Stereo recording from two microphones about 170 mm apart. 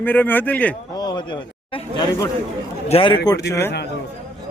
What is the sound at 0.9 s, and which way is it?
A man's voice, 25° left (ahead or behind).